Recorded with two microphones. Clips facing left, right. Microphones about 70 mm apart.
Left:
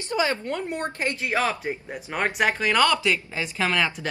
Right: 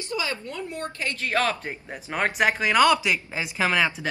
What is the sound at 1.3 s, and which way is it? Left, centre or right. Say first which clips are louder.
Speech: right 1 dB; centre.